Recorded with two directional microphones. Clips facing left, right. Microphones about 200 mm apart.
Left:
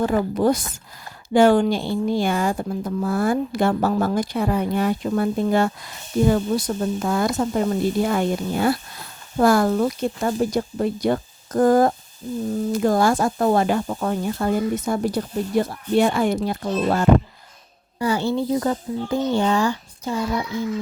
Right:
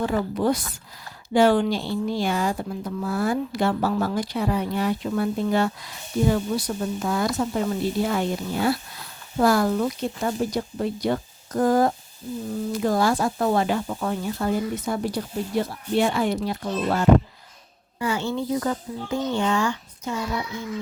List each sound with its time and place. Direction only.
0.0 s speech: 45° left (ahead or behind)
18.0 s speech: 35° left (ahead or behind)